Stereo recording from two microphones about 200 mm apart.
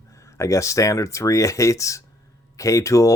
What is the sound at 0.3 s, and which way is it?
Speech, 15° left (ahead or behind).